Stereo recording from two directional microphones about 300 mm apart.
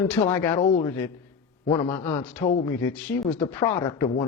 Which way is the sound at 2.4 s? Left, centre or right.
Left.